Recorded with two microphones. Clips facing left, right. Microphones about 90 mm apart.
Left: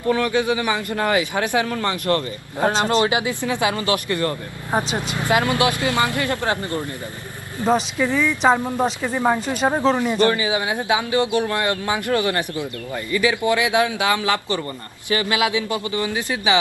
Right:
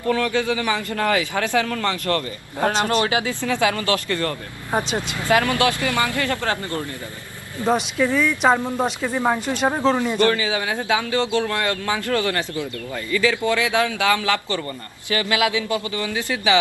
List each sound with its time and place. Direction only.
0.1 s speech: 20° left (ahead or behind)
7.7 s speech: 10° left (ahead or behind)
8.2 s speech: centre (ahead or behind)
8.5 s speech: 15° left (ahead or behind)